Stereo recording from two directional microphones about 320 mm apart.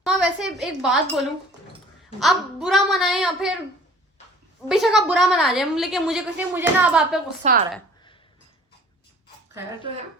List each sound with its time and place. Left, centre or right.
0.0 s a woman's voice: centre
4.7 s a woman's voice: centre
7.4 s a woman's voice: right
9.6 s speech: centre